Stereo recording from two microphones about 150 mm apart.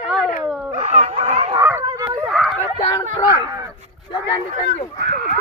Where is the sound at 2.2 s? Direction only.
Centre (ahead or behind).